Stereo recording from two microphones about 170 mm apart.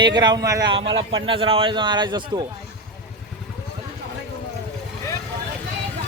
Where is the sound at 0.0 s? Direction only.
25° right (ahead or behind).